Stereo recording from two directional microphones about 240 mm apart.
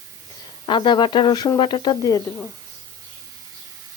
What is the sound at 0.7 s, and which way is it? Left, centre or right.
Speech, centre.